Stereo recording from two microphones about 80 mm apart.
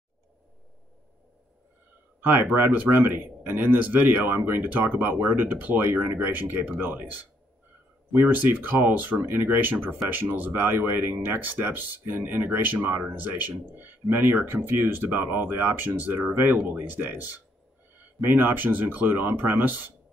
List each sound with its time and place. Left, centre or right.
2.1 s speech: right